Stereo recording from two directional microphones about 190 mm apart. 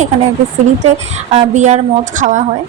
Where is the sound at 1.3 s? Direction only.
35° right (ahead or behind).